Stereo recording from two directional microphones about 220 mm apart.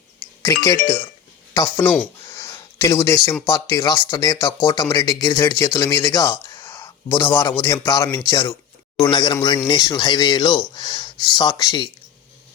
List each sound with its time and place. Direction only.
0.2 s music: 10° left (ahead or behind)
1.7 s speech: 10° left (ahead or behind)
2.3 s a sound: 10° left (ahead or behind)
3.0 s speech: 10° left (ahead or behind)
3.4 s speech: 20° left (ahead or behind)